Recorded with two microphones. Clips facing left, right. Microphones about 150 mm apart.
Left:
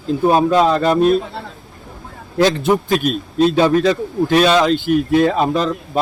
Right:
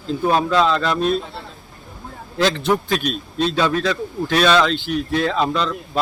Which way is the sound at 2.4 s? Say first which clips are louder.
Left 2 dB; 45° left (ahead or behind).